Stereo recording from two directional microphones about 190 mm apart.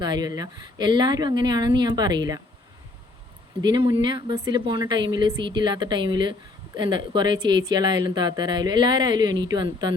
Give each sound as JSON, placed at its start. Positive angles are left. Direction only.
{"t": 0.0, "sound": "speech", "side_deg": -20}
{"t": 3.6, "sound": "speech", "side_deg": -25}